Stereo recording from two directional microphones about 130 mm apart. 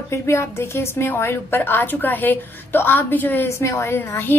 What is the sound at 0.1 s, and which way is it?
A woman's voice, 20° left (ahead or behind).